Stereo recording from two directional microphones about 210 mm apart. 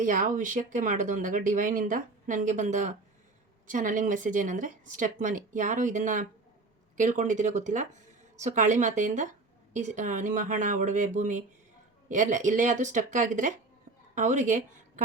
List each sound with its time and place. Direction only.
0.0 s speech: 40° right (ahead or behind)